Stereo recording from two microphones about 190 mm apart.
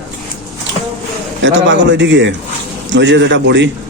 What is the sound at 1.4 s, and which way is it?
A man's voice, 70° right (ahead or behind).